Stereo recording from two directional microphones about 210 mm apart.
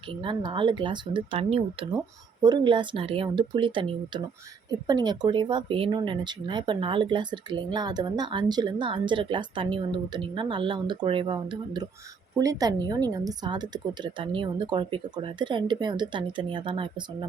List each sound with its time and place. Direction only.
0.1 s speech: 25° right (ahead or behind)